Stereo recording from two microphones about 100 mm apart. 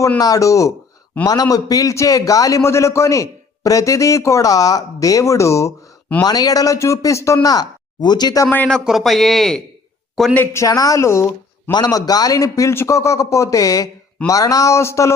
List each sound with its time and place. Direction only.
0.2 s a man's voice: 35° left (ahead or behind)
8.4 s speech: 15° left (ahead or behind)
8.8 s speech: 5° right (ahead or behind)
10.3 s speech: 25° left (ahead or behind)
11.7 s a man's voice: 40° left (ahead or behind)